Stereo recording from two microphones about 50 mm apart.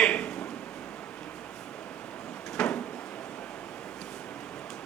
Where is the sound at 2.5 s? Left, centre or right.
Centre.